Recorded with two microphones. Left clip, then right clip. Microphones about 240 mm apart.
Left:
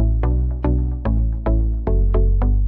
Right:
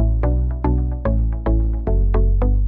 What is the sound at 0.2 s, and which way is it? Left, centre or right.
Music, centre.